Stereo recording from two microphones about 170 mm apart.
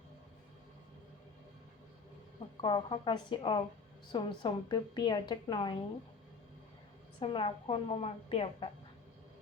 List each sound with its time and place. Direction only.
2.6 s a woman's voice: 30° left (ahead or behind)
7.2 s a woman's voice: 35° left (ahead or behind)